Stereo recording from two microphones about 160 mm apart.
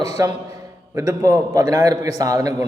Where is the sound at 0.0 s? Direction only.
20° right (ahead or behind).